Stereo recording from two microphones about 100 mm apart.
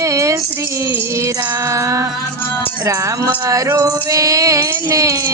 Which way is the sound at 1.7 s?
30° right (ahead or behind).